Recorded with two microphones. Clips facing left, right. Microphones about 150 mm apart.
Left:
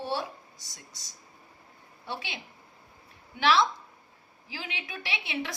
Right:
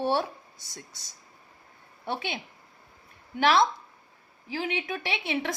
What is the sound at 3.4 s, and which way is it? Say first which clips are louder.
A woman's voice: right 2 dB; 45° right (ahead or behind).